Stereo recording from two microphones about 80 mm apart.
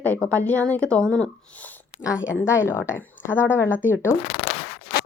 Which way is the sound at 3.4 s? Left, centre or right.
Left.